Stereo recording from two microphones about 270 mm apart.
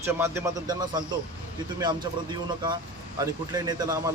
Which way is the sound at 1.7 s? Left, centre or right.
Centre.